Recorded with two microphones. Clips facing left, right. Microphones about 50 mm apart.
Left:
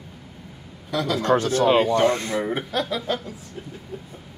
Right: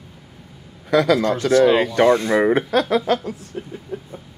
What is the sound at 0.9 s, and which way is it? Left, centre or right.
Speech, right.